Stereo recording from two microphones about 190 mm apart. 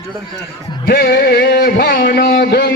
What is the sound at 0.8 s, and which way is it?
Music, 60° left (ahead or behind).